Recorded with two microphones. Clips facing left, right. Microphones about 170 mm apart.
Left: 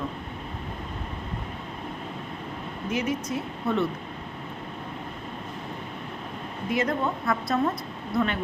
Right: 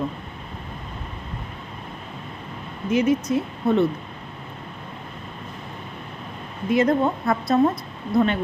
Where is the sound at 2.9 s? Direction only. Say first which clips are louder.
Right 9 dB; 20° right (ahead or behind).